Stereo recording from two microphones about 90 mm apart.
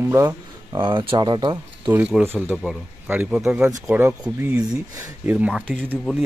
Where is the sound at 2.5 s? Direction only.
Centre (ahead or behind).